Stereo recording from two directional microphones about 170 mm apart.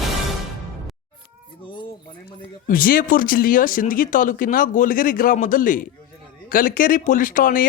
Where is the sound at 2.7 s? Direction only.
55° left (ahead or behind).